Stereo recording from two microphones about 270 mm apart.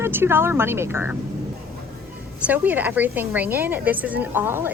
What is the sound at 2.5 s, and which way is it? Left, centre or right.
A woman's voice, centre.